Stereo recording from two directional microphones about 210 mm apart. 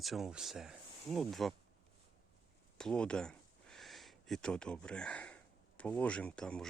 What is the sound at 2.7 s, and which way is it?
Speech, 5° left (ahead or behind).